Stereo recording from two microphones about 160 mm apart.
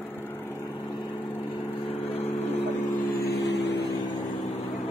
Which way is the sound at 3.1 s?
75° left (ahead or behind).